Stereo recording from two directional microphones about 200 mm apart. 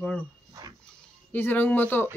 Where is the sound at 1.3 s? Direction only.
10° left (ahead or behind).